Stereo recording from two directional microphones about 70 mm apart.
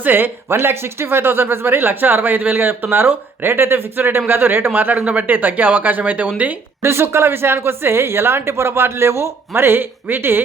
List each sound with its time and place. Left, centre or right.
0.0 s speech: right
6.8 s speech: right